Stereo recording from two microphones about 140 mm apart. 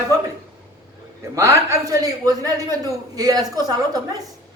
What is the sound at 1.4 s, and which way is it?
A man's voice, 20° right (ahead or behind).